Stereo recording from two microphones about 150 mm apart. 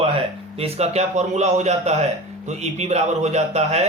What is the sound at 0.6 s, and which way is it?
A man's voice, 45° right (ahead or behind).